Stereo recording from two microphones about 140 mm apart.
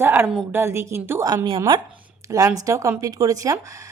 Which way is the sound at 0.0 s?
15° right (ahead or behind).